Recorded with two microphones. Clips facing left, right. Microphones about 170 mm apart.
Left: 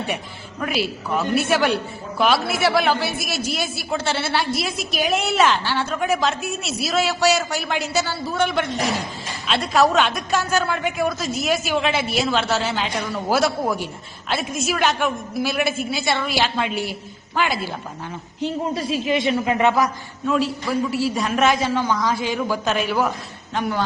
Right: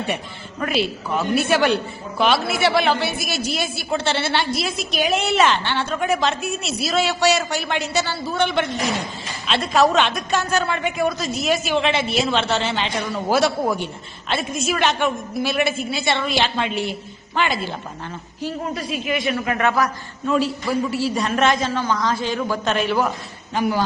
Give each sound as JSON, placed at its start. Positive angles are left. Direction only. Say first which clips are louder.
{"t": 0.6, "sound": "a woman's voice", "louder": "right 2 dB", "side_deg": 0}
{"t": 18.3, "sound": "speech", "louder": "left 3 dB", "side_deg": 20}
{"t": 20.2, "sound": "a woman's voice", "louder": "right 1 dB", "side_deg": 0}
{"t": 21.7, "sound": "a man's voice", "louder": "left 1 dB", "side_deg": 15}